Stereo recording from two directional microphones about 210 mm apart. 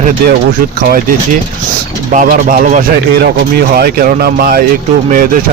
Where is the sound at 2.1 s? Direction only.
40° right (ahead or behind).